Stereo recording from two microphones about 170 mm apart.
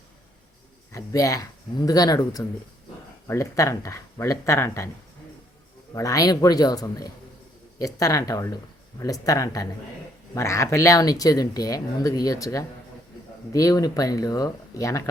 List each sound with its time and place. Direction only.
0.9 s speech: 20° left (ahead or behind)
5.9 s speech: 20° left (ahead or behind)